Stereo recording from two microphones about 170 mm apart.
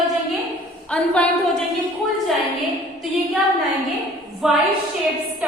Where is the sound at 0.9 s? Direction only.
5° left (ahead or behind).